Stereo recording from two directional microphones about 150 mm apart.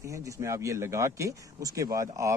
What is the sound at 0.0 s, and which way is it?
Speech, 20° right (ahead or behind).